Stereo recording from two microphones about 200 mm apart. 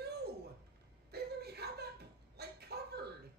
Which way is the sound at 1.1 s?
55° right (ahead or behind).